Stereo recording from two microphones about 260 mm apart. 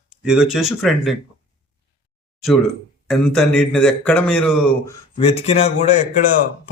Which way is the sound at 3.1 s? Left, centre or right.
Centre.